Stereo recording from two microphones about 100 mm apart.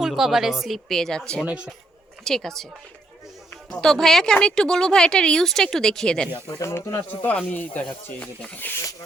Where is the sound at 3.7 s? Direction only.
5° left (ahead or behind).